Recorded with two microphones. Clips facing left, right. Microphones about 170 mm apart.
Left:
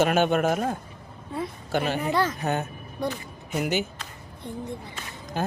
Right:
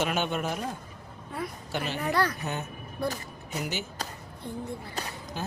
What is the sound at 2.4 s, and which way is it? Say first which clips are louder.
Speech: left 7 dB; 55° left (ahead or behind).